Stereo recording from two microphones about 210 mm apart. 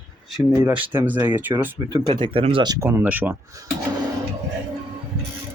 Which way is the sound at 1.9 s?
25° right (ahead or behind).